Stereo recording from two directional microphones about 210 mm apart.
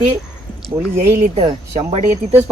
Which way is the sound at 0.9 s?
35° right (ahead or behind).